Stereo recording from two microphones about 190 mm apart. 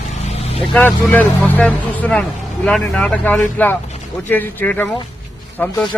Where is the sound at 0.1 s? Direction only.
30° left (ahead or behind).